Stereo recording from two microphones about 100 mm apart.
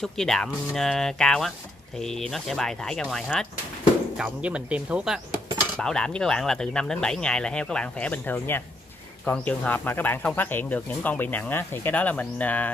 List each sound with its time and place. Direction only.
0.0 s speech: 5° left (ahead or behind)
4.2 s speech: 10° right (ahead or behind)
5.8 s speech: 10° left (ahead or behind)